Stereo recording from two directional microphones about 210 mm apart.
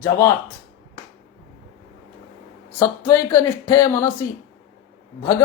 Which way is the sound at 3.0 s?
15° left (ahead or behind).